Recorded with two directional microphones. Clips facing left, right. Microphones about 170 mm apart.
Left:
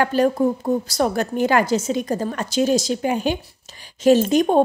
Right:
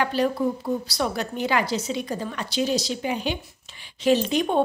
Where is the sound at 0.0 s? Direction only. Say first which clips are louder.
Left 5 dB; 45° left (ahead or behind).